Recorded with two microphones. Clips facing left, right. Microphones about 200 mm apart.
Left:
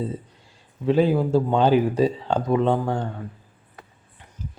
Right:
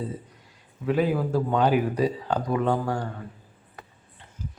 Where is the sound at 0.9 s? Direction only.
25° left (ahead or behind).